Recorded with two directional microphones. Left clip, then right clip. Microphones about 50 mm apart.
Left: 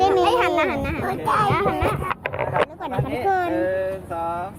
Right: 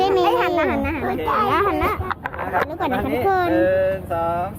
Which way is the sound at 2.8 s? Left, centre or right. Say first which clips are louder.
Right 4 dB; centre.